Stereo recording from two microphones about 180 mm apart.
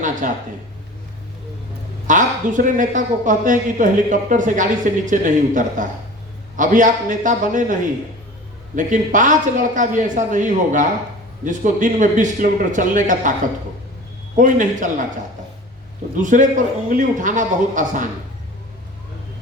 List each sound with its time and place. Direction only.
0.2 s speech: 45° right (ahead or behind)
2.0 s speech: 45° right (ahead or behind)
14.3 s speech: 45° right (ahead or behind)
16.2 s speech: 45° right (ahead or behind)